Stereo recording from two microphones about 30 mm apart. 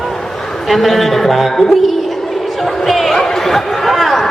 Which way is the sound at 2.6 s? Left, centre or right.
Centre.